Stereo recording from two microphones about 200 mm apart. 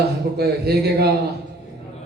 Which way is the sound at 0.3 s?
50° right (ahead or behind).